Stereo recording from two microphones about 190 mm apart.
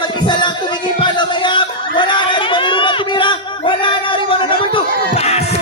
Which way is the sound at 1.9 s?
25° left (ahead or behind).